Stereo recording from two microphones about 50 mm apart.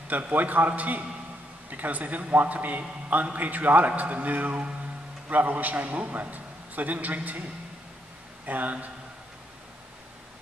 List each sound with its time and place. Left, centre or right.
0.3 s a man's voice: right
8.5 s a man's voice: right